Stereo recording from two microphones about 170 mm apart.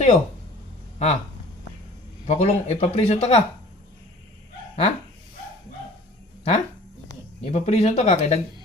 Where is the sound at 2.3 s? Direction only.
40° left (ahead or behind).